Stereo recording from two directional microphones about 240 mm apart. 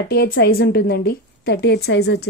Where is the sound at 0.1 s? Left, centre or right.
Left.